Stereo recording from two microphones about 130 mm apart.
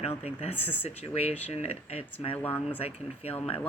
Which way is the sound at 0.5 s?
15° left (ahead or behind).